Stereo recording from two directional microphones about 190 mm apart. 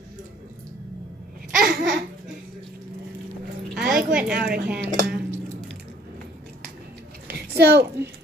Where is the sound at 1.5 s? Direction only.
45° right (ahead or behind).